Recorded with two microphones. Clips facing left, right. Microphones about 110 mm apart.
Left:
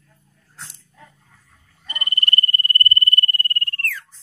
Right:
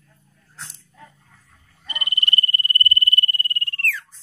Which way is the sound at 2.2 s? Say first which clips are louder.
Left 2 dB; 45° left (ahead or behind).